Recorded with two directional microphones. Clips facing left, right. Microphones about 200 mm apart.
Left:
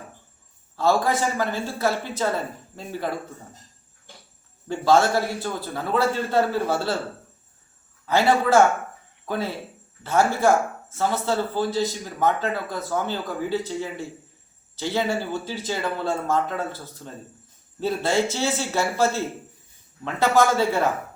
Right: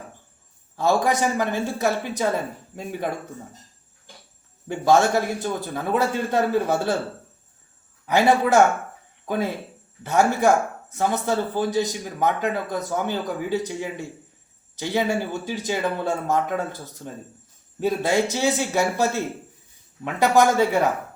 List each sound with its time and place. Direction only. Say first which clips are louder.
0.8 s a man's voice: right 1 dB; 15° right (ahead or behind)
4.7 s a man's voice: right 1 dB; 15° right (ahead or behind)
8.0 s a man's voice: right 1 dB; 15° right (ahead or behind)
17.7 s a man's voice: right 1 dB; 15° right (ahead or behind)